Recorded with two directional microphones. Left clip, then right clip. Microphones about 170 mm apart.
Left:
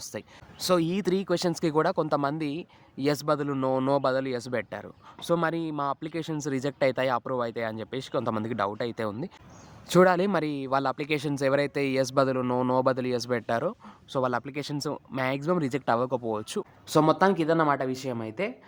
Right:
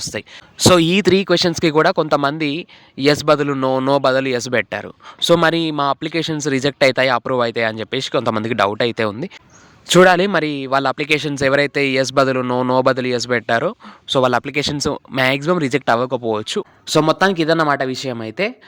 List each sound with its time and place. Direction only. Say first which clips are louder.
0.0 s speech: right 12 dB; 25° right (ahead or behind)